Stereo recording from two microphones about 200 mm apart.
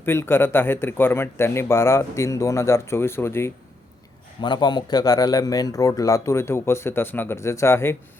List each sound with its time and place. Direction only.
0.0 s speech: 10° left (ahead or behind)
4.4 s speech: 20° left (ahead or behind)